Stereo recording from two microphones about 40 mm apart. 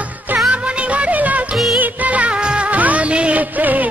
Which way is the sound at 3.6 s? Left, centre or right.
Right.